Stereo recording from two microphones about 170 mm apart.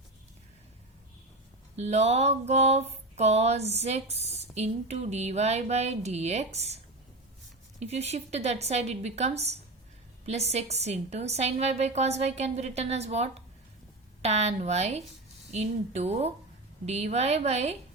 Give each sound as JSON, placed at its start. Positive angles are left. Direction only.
{"t": 1.7, "sound": "a woman's voice", "side_deg": -40}
{"t": 7.8, "sound": "a woman's voice", "side_deg": -40}